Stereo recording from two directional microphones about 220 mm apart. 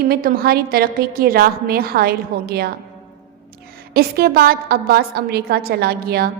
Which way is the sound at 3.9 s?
45° right (ahead or behind).